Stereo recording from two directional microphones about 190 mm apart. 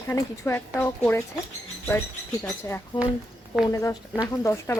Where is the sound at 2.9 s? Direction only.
25° left (ahead or behind).